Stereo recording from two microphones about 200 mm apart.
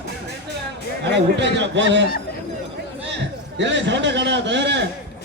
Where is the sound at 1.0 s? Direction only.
60° right (ahead or behind).